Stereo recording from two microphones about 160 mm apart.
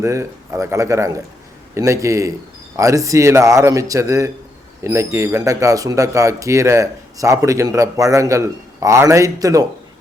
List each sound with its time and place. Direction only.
0.0 s speech: 20° right (ahead or behind)